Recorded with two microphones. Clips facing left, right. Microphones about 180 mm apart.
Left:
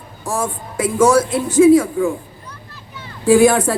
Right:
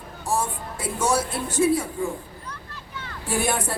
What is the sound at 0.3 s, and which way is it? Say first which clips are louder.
Speech: left 4 dB; 90° left.